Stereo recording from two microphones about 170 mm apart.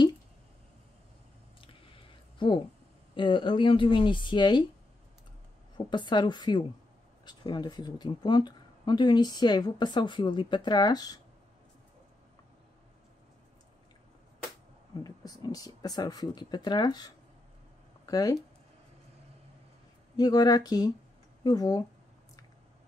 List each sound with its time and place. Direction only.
2.3 s a sound: 30° left (ahead or behind)
3.2 s speech: 30° left (ahead or behind)
5.8 s speech: 25° left (ahead or behind)
15.0 s speech: 25° left (ahead or behind)
20.2 s speech: 20° left (ahead or behind)